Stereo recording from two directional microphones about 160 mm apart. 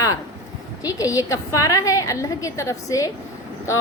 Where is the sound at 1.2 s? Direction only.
20° left (ahead or behind).